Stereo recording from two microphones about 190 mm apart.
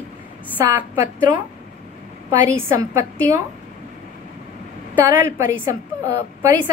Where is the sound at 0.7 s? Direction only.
15° right (ahead or behind).